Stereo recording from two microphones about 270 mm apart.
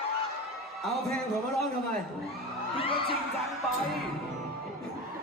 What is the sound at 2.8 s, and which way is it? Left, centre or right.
Crowd, centre.